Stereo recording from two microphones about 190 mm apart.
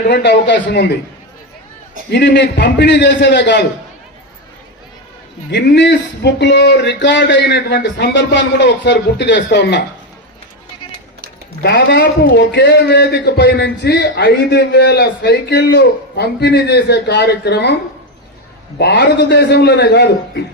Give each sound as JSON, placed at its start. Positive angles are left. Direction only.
{"t": 0.1, "sound": "a man's voice", "side_deg": 60}
{"t": 2.0, "sound": "a man's voice", "side_deg": 65}
{"t": 5.5, "sound": "a man's voice", "side_deg": 60}
{"t": 11.6, "sound": "a man's voice", "side_deg": 65}
{"t": 18.8, "sound": "a man's voice", "side_deg": 60}